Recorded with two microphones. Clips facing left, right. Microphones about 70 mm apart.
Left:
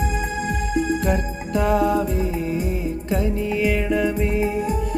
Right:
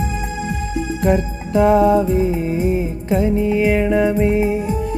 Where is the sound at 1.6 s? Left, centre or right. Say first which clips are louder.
Right 6 dB; right.